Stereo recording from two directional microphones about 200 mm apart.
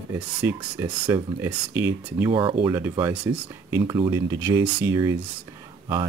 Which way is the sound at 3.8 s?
20° right (ahead or behind).